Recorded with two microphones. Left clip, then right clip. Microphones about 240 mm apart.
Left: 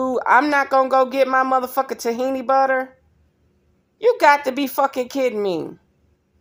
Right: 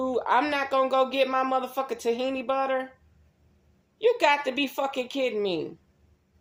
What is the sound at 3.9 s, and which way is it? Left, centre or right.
Speech, left.